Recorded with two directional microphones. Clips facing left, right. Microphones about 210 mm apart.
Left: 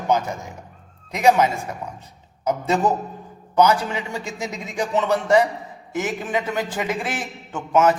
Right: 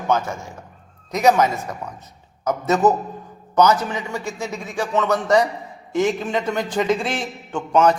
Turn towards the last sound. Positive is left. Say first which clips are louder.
# right 1 dB
turn(degrees=5)  # may be behind; listen again after turning